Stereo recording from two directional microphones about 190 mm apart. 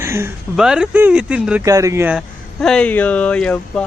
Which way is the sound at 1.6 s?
15° right (ahead or behind).